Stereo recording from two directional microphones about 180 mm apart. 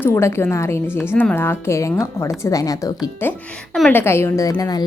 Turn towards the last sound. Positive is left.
turn(degrees=20)  # may be behind; listen again after turning